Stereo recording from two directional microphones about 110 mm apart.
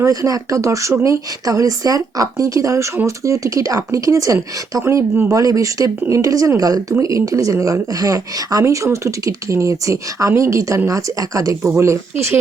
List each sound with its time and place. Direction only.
0.0 s speech: 30° right (ahead or behind)